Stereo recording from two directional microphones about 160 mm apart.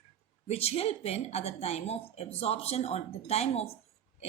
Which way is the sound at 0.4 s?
40° left (ahead or behind).